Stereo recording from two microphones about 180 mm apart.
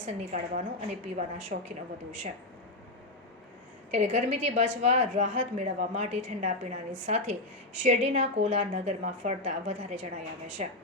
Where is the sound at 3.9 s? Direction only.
35° right (ahead or behind).